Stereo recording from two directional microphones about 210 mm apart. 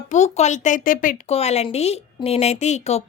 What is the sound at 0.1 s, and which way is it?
A woman's voice, 35° left (ahead or behind).